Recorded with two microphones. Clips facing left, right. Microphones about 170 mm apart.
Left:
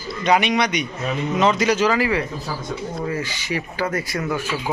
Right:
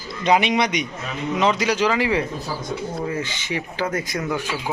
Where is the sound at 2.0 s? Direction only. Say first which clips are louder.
Even; 25° right (ahead or behind).